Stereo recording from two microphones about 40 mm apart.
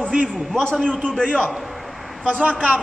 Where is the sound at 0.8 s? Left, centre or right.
Left.